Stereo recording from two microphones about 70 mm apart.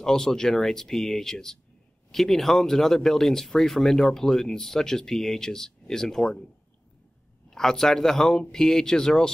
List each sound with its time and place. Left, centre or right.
0.0 s speech: centre
7.5 s speech: centre